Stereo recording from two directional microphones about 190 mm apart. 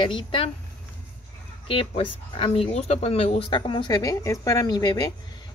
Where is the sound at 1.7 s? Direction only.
30° left (ahead or behind).